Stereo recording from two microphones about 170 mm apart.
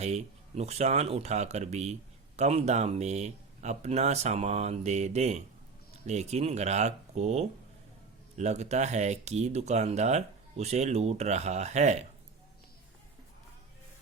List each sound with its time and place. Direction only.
0.0 s speech: 40° right (ahead or behind)